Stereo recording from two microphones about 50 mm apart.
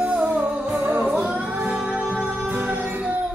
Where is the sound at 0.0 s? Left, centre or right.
Centre.